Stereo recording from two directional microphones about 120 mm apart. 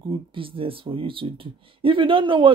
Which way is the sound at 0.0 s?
45° right (ahead or behind).